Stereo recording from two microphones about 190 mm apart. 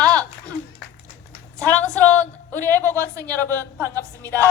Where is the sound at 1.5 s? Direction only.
10° left (ahead or behind).